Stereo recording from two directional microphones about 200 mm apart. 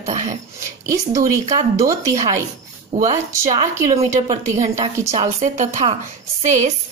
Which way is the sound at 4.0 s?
35° right (ahead or behind).